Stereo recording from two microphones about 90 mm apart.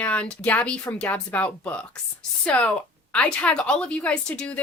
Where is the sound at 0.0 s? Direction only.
15° left (ahead or behind).